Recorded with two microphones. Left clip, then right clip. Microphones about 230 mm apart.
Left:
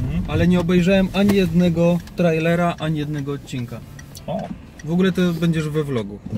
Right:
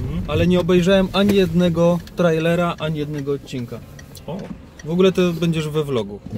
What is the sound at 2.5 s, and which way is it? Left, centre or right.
Speech, centre.